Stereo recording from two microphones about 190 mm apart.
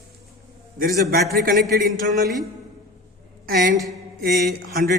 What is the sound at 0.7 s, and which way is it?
A man's voice, 50° right (ahead or behind).